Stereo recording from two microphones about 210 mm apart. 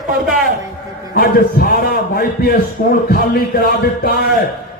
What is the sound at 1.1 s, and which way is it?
A man's voice, 45° left (ahead or behind).